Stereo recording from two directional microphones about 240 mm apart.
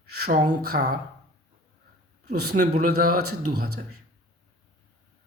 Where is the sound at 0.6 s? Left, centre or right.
Right.